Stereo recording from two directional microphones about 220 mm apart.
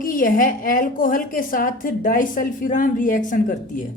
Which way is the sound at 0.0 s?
40° left (ahead or behind).